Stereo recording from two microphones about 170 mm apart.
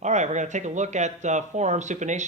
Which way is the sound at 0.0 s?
45° right (ahead or behind).